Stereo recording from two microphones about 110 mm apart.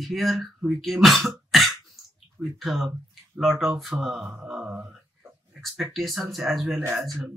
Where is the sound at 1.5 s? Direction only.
Centre (ahead or behind).